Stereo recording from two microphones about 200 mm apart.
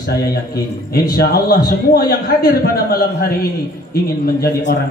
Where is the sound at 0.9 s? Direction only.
50° left (ahead or behind).